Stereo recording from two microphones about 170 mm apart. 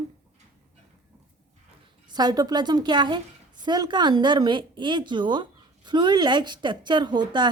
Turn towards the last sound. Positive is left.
turn(degrees=-25)  # may be behind; listen again after turning